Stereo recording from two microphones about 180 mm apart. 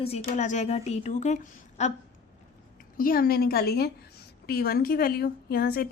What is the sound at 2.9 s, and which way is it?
A woman's voice, 50° left (ahead or behind).